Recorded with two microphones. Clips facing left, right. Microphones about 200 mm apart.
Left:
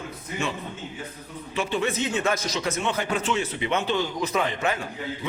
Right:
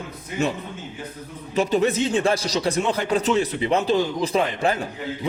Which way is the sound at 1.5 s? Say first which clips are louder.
Right 6 dB; 40° right (ahead or behind).